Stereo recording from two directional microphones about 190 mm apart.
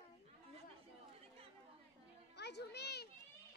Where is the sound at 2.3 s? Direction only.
60° left (ahead or behind).